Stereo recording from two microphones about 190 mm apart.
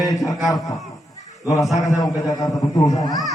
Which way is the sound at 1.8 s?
20° left (ahead or behind).